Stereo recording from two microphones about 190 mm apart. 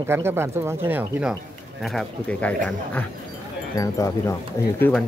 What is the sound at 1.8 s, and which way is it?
Speech, 5° left (ahead or behind).